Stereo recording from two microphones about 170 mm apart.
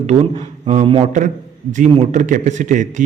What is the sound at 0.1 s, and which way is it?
A man's voice, 40° right (ahead or behind).